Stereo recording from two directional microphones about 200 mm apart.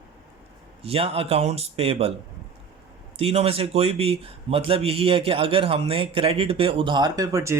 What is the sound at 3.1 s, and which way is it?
Speech, 30° right (ahead or behind).